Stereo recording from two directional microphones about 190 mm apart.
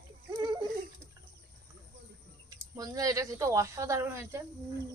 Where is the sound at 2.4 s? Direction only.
20° right (ahead or behind).